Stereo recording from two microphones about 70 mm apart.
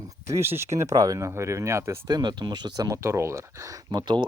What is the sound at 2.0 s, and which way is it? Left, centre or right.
Speech, right.